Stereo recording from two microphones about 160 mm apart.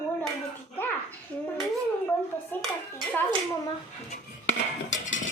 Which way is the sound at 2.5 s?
10° left (ahead or behind).